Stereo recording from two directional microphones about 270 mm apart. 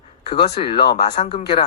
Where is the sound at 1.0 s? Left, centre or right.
Left.